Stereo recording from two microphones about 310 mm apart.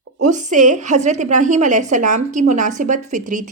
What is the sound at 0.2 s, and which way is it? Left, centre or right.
A woman's voice, right.